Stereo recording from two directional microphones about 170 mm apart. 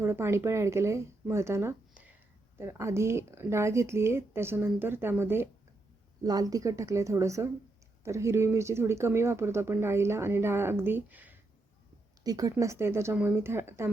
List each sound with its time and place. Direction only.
0.0 s a woman's voice: 15° right (ahead or behind)
12.2 s speech: 20° right (ahead or behind)